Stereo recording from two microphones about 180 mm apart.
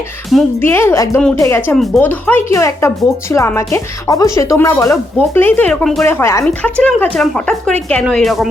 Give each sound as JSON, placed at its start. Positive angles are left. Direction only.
{"t": 0.6, "sound": "speech", "side_deg": 15}
{"t": 1.7, "sound": "speech", "side_deg": 0}